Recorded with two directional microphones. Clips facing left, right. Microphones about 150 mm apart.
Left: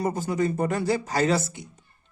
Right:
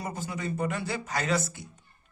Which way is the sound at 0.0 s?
40° left (ahead or behind).